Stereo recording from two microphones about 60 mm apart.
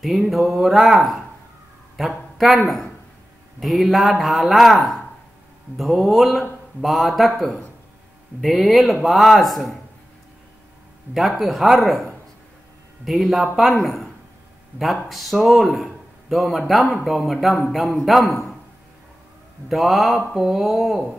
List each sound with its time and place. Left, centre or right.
0.0 s speech: centre
2.0 s speech: centre
11.1 s speech: centre
14.7 s speech: right
15.0 s speech: centre
19.7 s speech: centre